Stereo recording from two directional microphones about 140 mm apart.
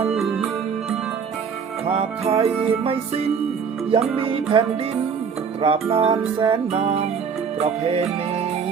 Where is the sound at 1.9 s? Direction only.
45° right (ahead or behind).